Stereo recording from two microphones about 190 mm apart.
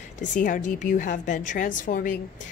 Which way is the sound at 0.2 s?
40° left (ahead or behind).